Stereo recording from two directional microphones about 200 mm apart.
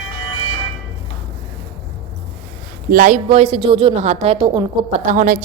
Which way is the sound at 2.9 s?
40° right (ahead or behind).